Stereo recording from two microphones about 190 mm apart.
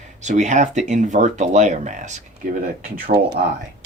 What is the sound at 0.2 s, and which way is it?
Speech, 40° right (ahead or behind).